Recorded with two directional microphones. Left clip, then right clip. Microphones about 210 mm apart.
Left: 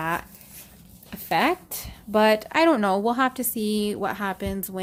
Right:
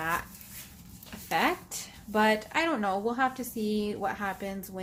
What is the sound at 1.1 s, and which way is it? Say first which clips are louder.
A woman's voice: left 5 dB; 50° left (ahead or behind).